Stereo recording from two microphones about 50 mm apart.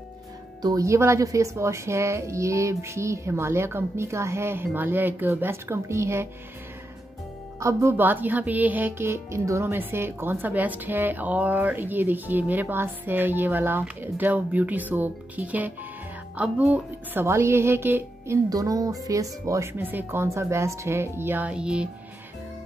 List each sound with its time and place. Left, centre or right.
0.8 s a woman's voice: right
7.9 s speech: right
8.9 s speech: right
9.7 s speech: right
17.3 s speech: right
19.1 s speech: right
19.8 s speech: right
20.3 s a woman's voice: right
21.2 s speech: right
21.5 s speech: centre